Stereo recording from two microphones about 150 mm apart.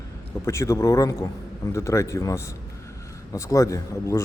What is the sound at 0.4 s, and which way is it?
Speech, 20° left (ahead or behind).